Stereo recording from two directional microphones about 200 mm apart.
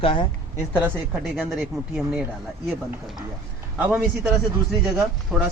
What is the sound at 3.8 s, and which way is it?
Speech, 10° right (ahead or behind).